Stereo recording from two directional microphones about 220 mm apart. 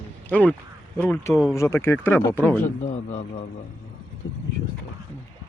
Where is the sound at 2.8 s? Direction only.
30° left (ahead or behind).